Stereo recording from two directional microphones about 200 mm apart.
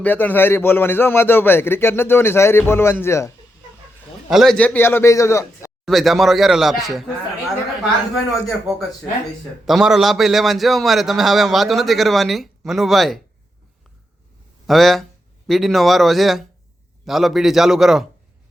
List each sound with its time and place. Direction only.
0.0 s a man's voice: 10° left (ahead or behind)
4.3 s a man's voice: centre (ahead or behind); by 5.7 s 15° left (ahead or behind)
5.8 s a man's voice: centre (ahead or behind)
8.1 s a man's voice: centre (ahead or behind)
14.7 s a man's voice: centre (ahead or behind)